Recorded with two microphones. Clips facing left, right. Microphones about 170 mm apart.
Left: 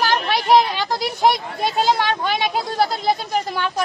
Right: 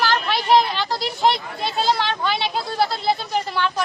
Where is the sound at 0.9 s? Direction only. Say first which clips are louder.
Left 2 dB; 45° left (ahead or behind).